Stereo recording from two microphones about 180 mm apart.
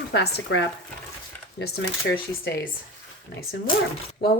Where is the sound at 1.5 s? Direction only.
65° left (ahead or behind).